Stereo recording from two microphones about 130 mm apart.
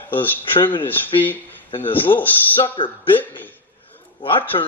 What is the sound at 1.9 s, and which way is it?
Speech, 15° left (ahead or behind).